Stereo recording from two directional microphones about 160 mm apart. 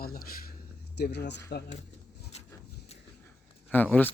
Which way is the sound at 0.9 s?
90° left.